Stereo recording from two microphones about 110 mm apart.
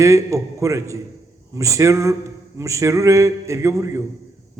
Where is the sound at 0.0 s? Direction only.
30° right (ahead or behind).